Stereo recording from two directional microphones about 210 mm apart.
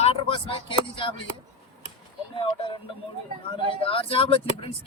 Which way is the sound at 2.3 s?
25° left (ahead or behind).